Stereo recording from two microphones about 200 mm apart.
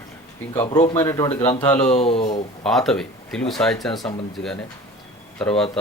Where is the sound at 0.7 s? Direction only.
35° left (ahead or behind).